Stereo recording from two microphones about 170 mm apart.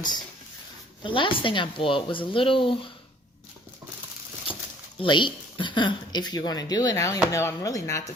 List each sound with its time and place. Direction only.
1.0 s speech: 30° left (ahead or behind)
4.9 s speech: 30° left (ahead or behind)